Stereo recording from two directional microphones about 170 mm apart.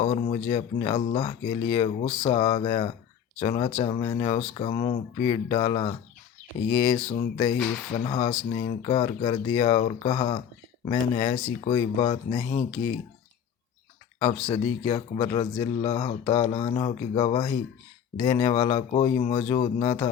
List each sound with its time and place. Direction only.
0.0 s speech: 35° left (ahead or behind)
14.4 s speech: 35° left (ahead or behind)